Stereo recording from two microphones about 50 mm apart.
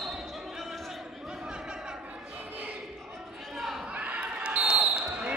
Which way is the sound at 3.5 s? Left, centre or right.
Centre.